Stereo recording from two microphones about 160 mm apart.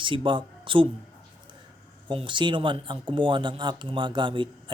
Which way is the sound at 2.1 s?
30° right (ahead or behind).